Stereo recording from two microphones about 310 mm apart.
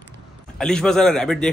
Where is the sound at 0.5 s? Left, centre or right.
Centre.